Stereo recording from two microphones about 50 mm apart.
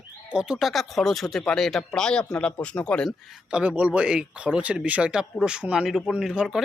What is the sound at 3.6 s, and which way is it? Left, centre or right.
Speech, right.